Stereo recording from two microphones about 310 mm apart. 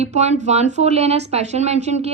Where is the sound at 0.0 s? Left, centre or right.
Right.